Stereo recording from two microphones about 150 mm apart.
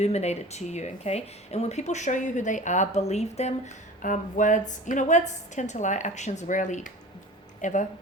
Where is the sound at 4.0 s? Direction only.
60° left (ahead or behind).